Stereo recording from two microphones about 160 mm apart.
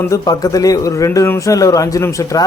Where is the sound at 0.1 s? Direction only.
20° left (ahead or behind).